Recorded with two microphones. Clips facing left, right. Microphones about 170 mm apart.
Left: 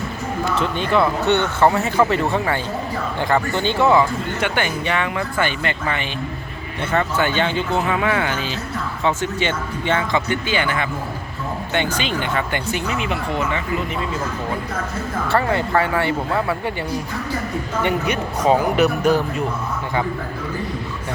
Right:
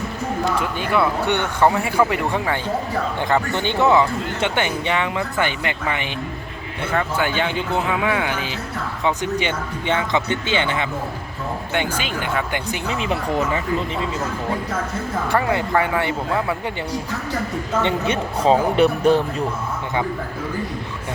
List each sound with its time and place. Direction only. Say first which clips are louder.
0.5 s speech: left 6 dB; 10° right (ahead or behind)
11.7 s speech: left 2 dB; 10° right (ahead or behind)
12.9 s speech: right 5 dB; 35° right (ahead or behind)
15.3 s speech: left 1 dB; 15° right (ahead or behind)
17.8 s speech: even; 25° right (ahead or behind)